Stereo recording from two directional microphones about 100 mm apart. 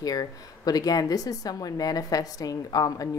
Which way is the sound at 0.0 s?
40° left (ahead or behind).